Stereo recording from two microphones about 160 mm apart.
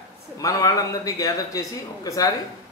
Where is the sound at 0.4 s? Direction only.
20° left (ahead or behind).